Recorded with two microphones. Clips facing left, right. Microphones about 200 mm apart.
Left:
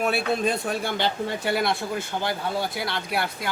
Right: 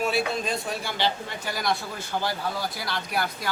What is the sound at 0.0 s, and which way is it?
Speech, 55° left (ahead or behind).